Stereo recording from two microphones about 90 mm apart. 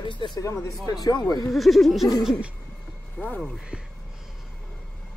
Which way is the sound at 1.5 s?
Centre (ahead or behind).